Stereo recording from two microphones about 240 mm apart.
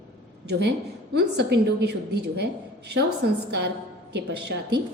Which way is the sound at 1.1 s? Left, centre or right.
Right.